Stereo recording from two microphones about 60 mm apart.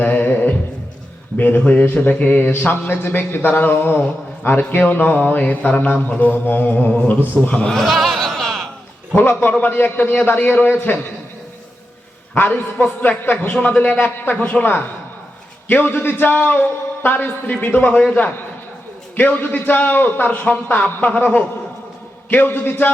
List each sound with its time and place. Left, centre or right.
0.0 s a sound: left
1.4 s speech: left
7.4 s speech: centre
7.7 s a sound: centre
9.1 s speech: left
12.3 s speech: left